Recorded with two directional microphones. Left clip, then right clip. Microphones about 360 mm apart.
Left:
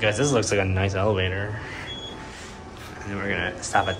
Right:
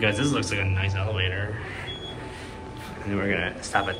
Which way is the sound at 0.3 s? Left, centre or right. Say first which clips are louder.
Left 5 dB; centre.